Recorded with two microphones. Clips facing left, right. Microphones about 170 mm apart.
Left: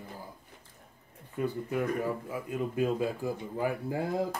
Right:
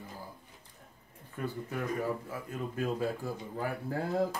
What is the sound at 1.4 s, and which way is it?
Speech, 15° left (ahead or behind).